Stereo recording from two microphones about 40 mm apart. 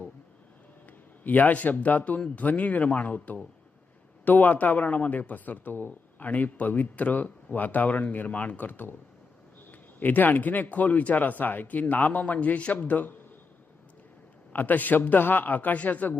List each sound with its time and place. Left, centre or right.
0.9 s a man's voice: left
10.0 s speech: left
14.5 s speech: left